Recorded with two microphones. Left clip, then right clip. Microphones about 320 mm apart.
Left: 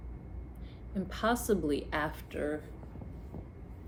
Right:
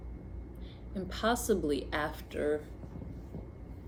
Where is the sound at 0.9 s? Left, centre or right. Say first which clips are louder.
Even; centre.